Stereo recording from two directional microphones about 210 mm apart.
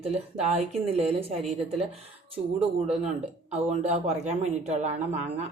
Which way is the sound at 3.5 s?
30° right (ahead or behind).